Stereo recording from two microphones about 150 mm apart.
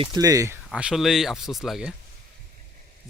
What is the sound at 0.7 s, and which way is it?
Speech, 5° right (ahead or behind).